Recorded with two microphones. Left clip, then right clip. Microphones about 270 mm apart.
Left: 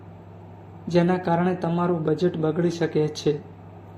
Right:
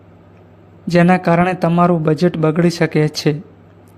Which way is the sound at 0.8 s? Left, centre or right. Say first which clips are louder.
Right 9 dB; right.